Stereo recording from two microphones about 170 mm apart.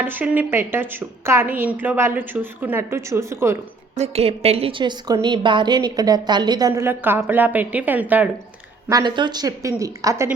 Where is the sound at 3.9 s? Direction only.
40° right (ahead or behind); by 8.3 s 10° right (ahead or behind).